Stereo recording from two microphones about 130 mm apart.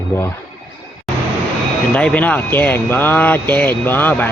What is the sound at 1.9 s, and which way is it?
Speech, 10° left (ahead or behind).